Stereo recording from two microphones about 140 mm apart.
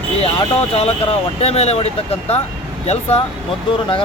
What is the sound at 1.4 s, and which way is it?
Speech, 45° left (ahead or behind).